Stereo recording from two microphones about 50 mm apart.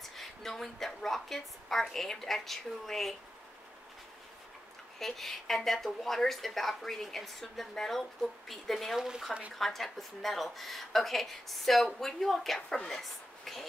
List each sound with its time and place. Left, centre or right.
0.0 s a woman's voice: centre
4.9 s a woman's voice: centre
8.9 s speech: centre
9.6 s a woman's voice: centre
12.6 s a woman's voice: centre